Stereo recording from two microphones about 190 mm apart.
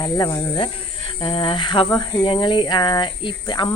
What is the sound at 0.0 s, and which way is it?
Speech, 20° left (ahead or behind).